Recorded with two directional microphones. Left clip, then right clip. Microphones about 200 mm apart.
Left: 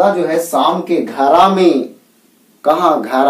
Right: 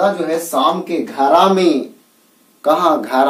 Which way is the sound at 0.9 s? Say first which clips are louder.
Left 2 dB; 15° right (ahead or behind).